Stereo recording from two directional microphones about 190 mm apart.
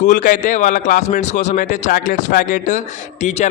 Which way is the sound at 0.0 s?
40° left (ahead or behind).